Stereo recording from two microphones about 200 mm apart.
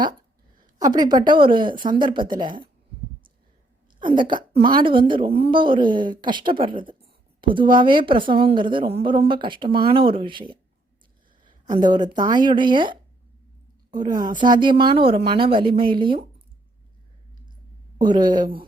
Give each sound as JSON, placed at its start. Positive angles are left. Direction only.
{"t": 0.8, "sound": "a woman's voice", "side_deg": -20}
{"t": 4.0, "sound": "a woman's voice", "side_deg": -25}
{"t": 17.9, "sound": "speech", "side_deg": -20}